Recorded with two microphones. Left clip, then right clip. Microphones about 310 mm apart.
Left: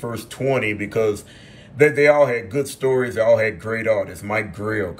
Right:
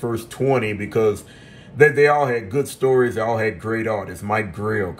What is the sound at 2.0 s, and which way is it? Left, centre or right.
A man's voice, centre.